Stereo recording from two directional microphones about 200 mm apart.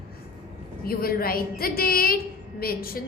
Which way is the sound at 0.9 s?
50° left (ahead or behind).